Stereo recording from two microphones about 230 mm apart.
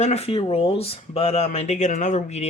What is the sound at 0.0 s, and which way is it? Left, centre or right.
Speech, left.